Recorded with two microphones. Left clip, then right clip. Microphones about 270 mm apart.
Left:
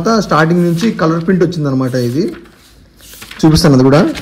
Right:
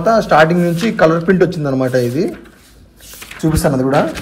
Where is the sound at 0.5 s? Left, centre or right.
Centre.